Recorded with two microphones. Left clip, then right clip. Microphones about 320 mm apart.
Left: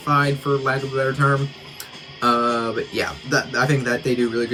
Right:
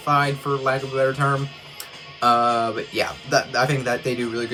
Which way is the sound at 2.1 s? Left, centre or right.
Centre.